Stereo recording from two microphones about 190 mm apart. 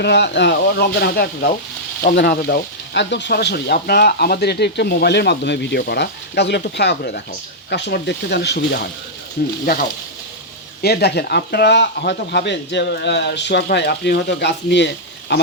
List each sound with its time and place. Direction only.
0.0 s frying: 65° left (ahead or behind)
9.4 s speech: 55° left (ahead or behind)
10.8 s frying: 60° left (ahead or behind)